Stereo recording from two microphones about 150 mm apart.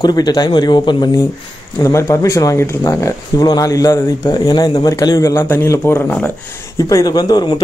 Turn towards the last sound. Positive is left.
turn(degrees=25)  # may be behind; listen again after turning